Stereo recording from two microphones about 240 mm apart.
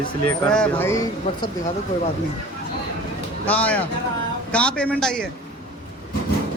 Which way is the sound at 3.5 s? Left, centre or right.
Centre.